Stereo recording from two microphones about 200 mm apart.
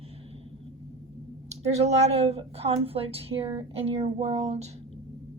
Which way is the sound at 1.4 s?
35° right (ahead or behind).